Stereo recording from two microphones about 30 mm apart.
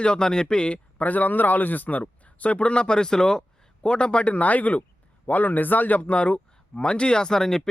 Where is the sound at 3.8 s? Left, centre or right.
Left.